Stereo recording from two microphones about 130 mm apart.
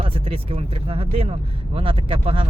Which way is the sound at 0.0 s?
45° right (ahead or behind).